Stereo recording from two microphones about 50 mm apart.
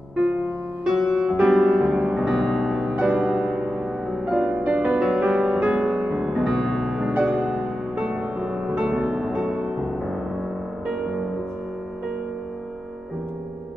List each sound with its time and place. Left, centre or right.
0.1 s music: right
0.8 s music: centre
2.2 s music: centre; by 6.3 s right
6.3 s music: centre
7.2 s music: centre
10.9 s music: centre